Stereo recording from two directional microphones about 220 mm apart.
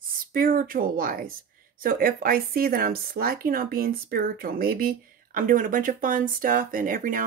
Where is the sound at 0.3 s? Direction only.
40° right (ahead or behind).